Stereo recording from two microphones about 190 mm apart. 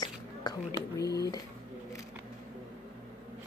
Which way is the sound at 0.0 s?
20° left (ahead or behind).